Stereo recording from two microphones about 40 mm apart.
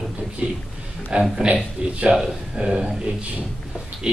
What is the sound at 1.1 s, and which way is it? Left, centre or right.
Speech, right.